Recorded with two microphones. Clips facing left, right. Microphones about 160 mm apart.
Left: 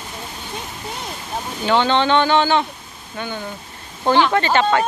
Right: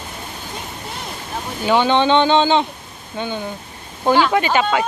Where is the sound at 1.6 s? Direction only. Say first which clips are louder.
Right 2 dB; 10° right (ahead or behind).